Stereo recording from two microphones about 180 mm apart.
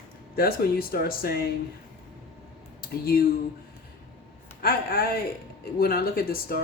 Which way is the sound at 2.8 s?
55° left (ahead or behind).